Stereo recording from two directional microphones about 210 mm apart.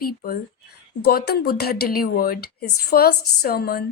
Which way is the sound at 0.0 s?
45° left (ahead or behind).